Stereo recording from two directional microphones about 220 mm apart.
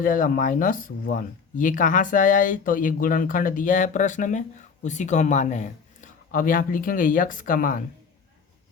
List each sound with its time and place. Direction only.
0.0 s speech: 40° left (ahead or behind)